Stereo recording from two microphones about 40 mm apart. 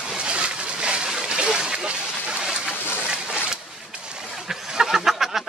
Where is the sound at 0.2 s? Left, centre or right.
Right.